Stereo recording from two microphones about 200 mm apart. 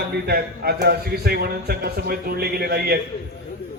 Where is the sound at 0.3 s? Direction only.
50° right (ahead or behind).